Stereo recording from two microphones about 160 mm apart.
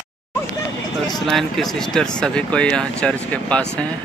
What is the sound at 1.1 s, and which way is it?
Speech, centre (ahead or behind).